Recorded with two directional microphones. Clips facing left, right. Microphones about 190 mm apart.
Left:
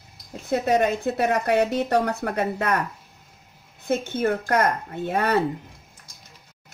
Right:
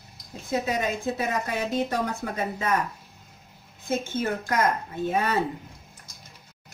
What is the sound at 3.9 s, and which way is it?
Speech, 60° left (ahead or behind).